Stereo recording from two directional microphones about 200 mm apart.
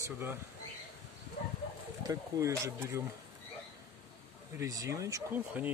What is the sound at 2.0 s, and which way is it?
Speech, 15° right (ahead or behind).